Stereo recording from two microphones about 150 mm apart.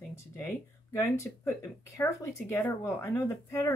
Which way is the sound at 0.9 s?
20° left (ahead or behind).